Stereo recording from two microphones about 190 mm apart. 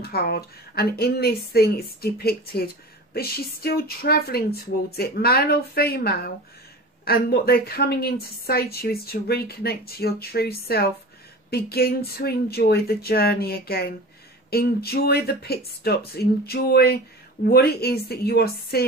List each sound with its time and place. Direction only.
0.0 s a woman's voice: 55° left (ahead or behind)